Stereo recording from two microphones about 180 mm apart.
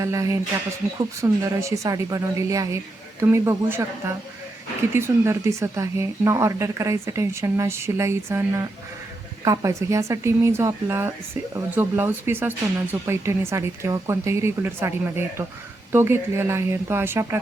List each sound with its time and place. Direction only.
0.0 s speech: 15° right (ahead or behind)